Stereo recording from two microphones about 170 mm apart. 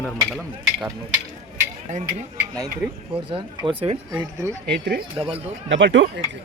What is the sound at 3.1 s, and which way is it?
Speech, 30° right (ahead or behind).